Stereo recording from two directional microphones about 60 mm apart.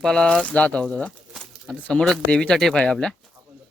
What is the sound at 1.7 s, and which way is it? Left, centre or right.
Speech, centre.